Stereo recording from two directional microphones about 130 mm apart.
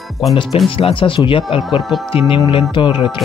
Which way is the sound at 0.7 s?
45° left (ahead or behind).